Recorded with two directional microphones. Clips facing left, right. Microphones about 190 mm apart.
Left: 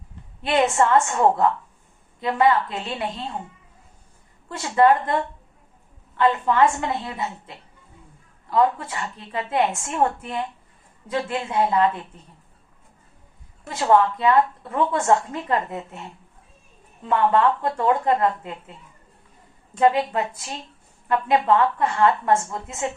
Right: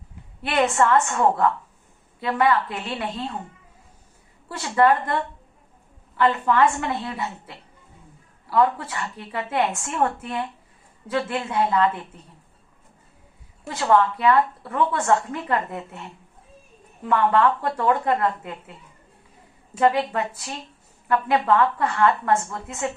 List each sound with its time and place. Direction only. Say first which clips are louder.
0.4 s a woman's voice: left 1 dB; 20° left (ahead or behind)
4.5 s a woman's voice: left 2 dB; 20° left (ahead or behind)
6.1 s a woman's voice: left 1 dB; 20° left (ahead or behind)
13.7 s a woman's voice: left 1 dB; 20° left (ahead or behind)
19.8 s a woman's voice: left 1 dB; 20° left (ahead or behind)